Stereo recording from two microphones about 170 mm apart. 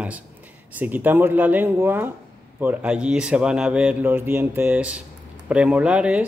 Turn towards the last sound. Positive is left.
turn(degrees=-5)  # may be behind; listen again after turning